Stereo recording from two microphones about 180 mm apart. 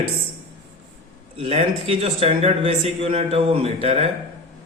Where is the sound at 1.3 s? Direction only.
30° right (ahead or behind).